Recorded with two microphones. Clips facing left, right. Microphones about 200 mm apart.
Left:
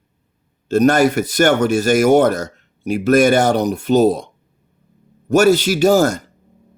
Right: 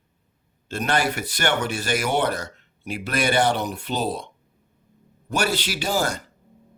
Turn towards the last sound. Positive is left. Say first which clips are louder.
# left 12 dB
turn(degrees=45)  # may be behind; listen again after turning